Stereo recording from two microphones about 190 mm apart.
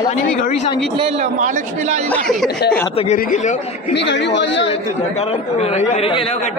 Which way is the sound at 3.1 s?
40° left (ahead or behind).